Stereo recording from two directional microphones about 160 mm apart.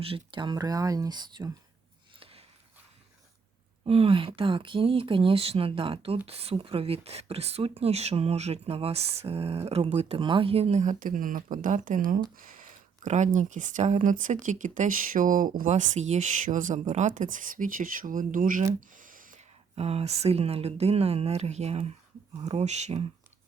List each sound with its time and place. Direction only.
0.0 s speech: 35° right (ahead or behind)
2.1 s a sound: 35° right (ahead or behind)
3.8 s speech: 35° right (ahead or behind); by 19.4 s 60° right (ahead or behind)
19.7 s speech: 40° right (ahead or behind)